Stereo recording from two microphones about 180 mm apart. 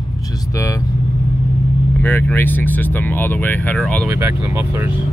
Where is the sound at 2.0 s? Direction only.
10° left (ahead or behind).